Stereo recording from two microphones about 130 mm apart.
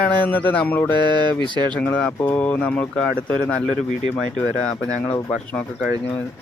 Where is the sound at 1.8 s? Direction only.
10° left (ahead or behind).